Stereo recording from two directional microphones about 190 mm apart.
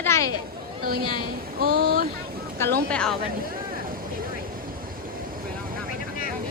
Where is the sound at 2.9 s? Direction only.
5° left (ahead or behind).